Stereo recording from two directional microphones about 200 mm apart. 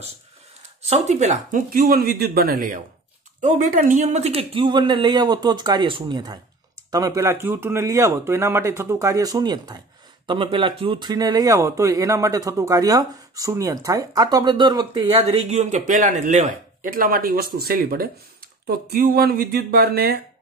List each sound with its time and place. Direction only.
0.8 s a man's voice: 35° right (ahead or behind); by 20.2 s 50° right (ahead or behind)